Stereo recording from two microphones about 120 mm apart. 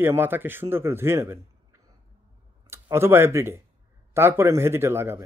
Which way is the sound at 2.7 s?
20° right (ahead or behind).